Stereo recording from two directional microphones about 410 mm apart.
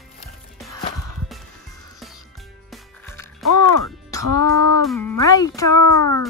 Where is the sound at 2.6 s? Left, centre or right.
Centre.